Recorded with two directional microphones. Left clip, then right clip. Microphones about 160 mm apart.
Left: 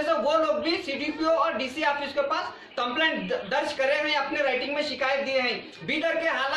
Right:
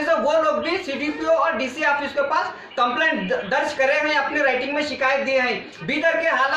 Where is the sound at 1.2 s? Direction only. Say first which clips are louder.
Right 5 dB; 15° right (ahead or behind).